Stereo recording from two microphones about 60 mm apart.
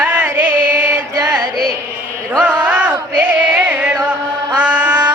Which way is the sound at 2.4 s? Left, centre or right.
Right.